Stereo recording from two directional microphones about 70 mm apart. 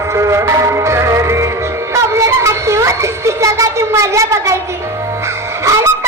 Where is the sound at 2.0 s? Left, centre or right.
Right.